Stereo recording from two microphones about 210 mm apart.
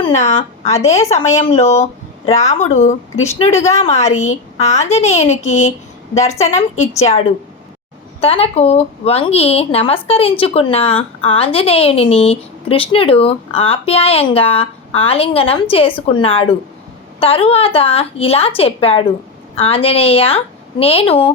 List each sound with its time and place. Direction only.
0.7 s a woman's voice: 30° left (ahead or behind)